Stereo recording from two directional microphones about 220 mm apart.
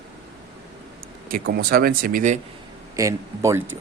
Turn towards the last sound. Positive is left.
turn(degrees=-15)  # may be behind; listen again after turning